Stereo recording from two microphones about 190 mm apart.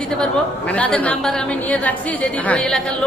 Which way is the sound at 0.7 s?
5° left (ahead or behind).